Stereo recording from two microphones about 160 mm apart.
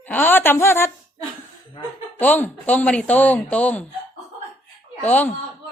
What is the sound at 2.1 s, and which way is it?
Speech, 10° left (ahead or behind).